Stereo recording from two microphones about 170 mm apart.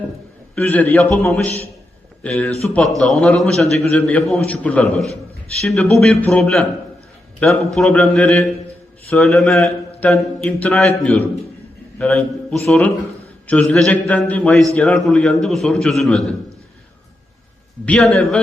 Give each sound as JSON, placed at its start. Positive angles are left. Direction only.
{"t": 0.5, "sound": "a man's voice", "side_deg": 10}
{"t": 1.5, "sound": "a man's voice", "side_deg": 40}
{"t": 2.2, "sound": "a man's voice", "side_deg": 5}
{"t": 17.8, "sound": "a man's voice", "side_deg": 5}